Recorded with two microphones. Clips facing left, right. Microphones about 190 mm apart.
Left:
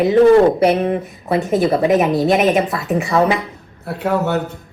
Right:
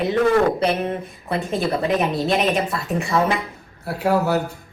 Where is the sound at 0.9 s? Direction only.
20° left (ahead or behind).